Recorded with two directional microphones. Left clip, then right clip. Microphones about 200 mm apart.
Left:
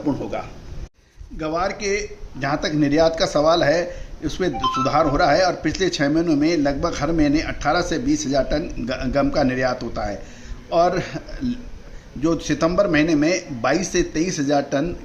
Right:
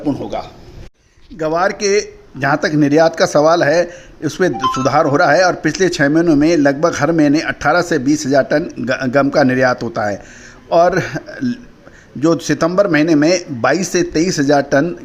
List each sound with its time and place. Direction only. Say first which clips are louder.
1.4 s a man's voice: right 8 dB; 40° right (ahead or behind)